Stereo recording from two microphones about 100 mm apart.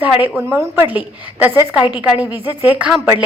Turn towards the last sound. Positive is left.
turn(degrees=-15)  # may be behind; listen again after turning